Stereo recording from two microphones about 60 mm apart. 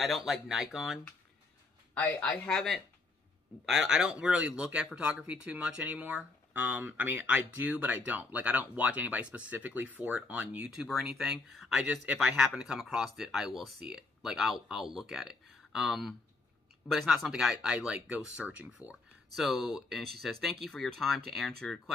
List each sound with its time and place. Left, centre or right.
0.0 s speech: centre
2.1 s speech: left
2.5 s speech: centre
3.6 s speech: centre
6.0 s speech: right
10.7 s speech: centre
19.3 s speech: centre